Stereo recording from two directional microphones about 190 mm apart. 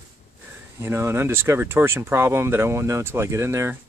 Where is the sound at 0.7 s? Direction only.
15° right (ahead or behind).